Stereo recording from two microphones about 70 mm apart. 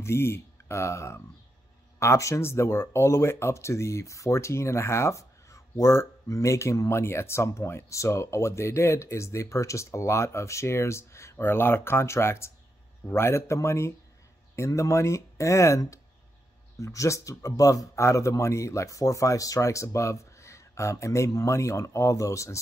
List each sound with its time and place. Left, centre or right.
0.0 s speech: left